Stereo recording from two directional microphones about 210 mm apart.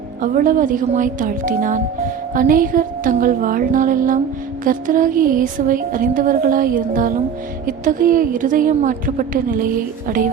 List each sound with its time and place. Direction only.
0.2 s speech: 40° right (ahead or behind)